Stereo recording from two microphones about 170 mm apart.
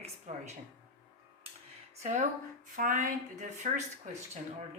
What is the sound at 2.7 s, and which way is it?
A woman's voice, 50° right (ahead or behind).